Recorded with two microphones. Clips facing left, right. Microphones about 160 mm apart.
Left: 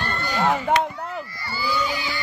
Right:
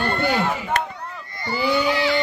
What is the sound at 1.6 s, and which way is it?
Baby cry, 65° right (ahead or behind).